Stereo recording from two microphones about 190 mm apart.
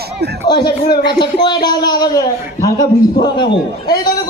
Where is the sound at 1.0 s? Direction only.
60° left (ahead or behind).